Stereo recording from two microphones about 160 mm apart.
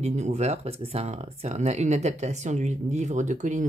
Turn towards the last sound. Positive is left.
turn(degrees=-50)  # may be behind; listen again after turning